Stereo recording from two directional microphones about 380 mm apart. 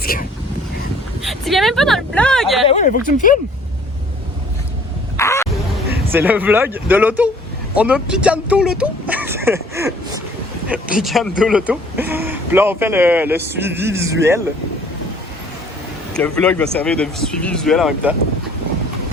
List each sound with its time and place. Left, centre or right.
0.0 s vehicle: left
1.3 s speech: centre
2.6 s speech: centre
5.1 s a sound: centre
6.1 s speech: centre
16.1 s speech: centre